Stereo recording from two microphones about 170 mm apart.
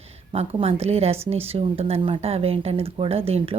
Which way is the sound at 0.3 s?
35° right (ahead or behind).